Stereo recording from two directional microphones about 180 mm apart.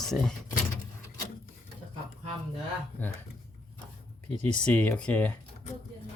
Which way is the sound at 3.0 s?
10° left (ahead or behind).